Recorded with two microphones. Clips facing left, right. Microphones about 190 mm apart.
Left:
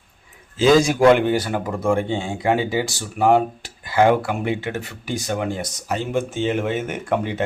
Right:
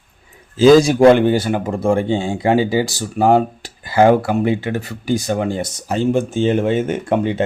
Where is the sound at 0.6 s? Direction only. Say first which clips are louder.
Right 5 dB; 35° right (ahead or behind).